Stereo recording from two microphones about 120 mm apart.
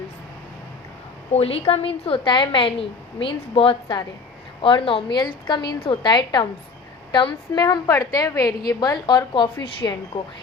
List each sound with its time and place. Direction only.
1.3 s a woman's voice: 55° left (ahead or behind); by 6.5 s 35° left (ahead or behind)
7.5 s a woman's voice: 35° left (ahead or behind)